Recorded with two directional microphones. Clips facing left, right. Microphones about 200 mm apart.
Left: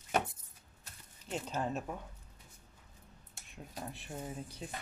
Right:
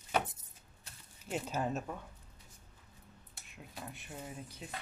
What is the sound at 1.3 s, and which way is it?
Speech, 5° right (ahead or behind).